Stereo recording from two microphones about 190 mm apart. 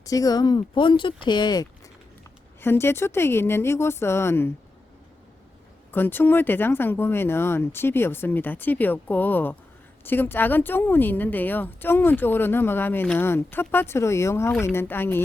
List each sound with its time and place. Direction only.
0.0 s speech: 20° left (ahead or behind)
2.6 s speech: 10° left (ahead or behind)
5.9 s speech: 10° left (ahead or behind)